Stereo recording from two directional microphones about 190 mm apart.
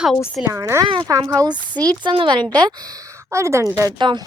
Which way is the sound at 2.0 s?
25° right (ahead or behind).